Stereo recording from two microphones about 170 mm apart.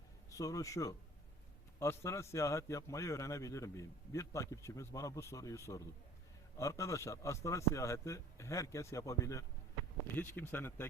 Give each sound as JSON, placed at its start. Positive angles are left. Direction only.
{"t": 0.3, "sound": "a man's voice", "side_deg": 20}